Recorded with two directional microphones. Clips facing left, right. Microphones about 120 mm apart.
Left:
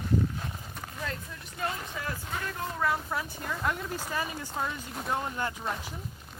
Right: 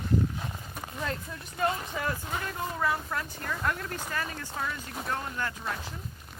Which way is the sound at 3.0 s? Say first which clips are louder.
Even; 10° left (ahead or behind).